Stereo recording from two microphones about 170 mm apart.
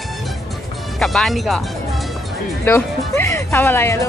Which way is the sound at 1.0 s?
Centre (ahead or behind).